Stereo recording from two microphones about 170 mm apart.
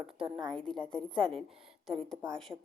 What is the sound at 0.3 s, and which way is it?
Speech, 25° right (ahead or behind).